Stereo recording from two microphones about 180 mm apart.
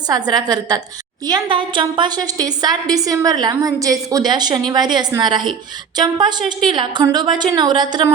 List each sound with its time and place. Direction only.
0.1 s a woman's voice: 20° right (ahead or behind)